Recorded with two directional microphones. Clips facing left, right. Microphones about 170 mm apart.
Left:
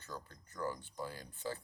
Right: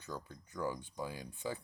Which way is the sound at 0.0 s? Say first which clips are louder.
Right 3 dB; 15° right (ahead or behind).